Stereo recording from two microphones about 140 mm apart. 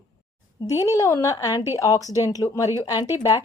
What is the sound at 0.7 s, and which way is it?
Speech, 25° left (ahead or behind).